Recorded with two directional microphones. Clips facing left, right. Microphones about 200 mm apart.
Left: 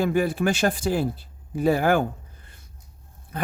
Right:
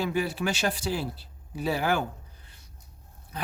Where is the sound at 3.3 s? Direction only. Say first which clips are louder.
Left 6 dB; 50° left (ahead or behind).